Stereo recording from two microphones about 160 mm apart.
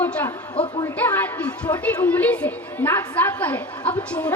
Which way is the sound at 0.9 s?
15° left (ahead or behind).